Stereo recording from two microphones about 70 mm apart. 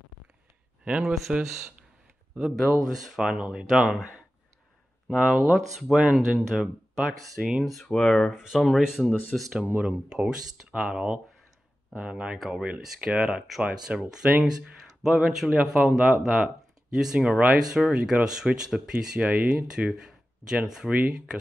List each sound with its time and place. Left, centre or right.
0.8 s speech: centre
1.1 s speech: centre
8.3 s speech: centre
13.9 s speech: centre
14.2 s speech: centre